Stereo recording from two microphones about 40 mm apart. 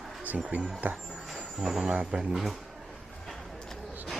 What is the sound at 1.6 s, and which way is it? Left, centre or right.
Speech, centre.